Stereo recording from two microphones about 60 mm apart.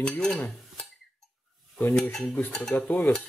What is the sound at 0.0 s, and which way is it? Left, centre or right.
Stir, centre.